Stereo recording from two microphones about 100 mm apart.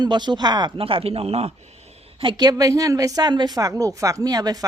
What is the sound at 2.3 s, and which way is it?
Speech, 40° right (ahead or behind).